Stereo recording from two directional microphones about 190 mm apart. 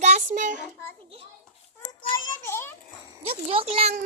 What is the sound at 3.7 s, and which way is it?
Speech, 35° right (ahead or behind).